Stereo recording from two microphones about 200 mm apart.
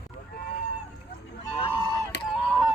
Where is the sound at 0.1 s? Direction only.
30° left (ahead or behind).